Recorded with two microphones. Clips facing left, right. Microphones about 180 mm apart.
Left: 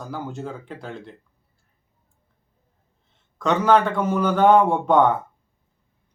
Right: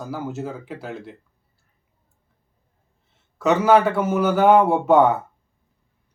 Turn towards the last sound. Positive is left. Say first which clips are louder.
# right 2 dB
turn(degrees=-5)  # may be behind; listen again after turning